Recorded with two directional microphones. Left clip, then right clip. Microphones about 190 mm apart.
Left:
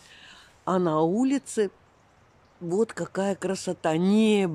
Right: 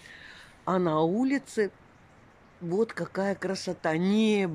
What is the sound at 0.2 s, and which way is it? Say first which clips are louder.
Speech: left 3 dB; 15° left (ahead or behind).